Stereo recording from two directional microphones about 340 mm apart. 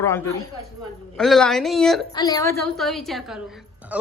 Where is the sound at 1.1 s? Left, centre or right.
Centre.